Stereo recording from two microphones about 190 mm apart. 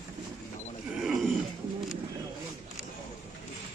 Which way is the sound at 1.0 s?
Centre (ahead or behind).